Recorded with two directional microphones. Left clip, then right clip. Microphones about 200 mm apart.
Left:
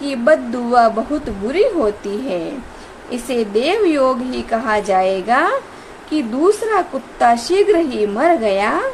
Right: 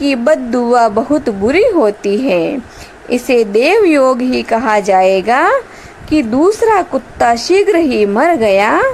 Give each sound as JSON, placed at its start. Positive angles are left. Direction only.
{"t": 0.0, "sound": "a woman's voice", "side_deg": -30}